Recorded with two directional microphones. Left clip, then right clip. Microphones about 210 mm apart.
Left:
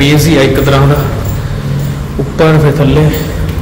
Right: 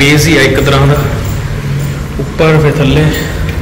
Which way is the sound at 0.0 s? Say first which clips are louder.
Right 1 dB; 15° left (ahead or behind).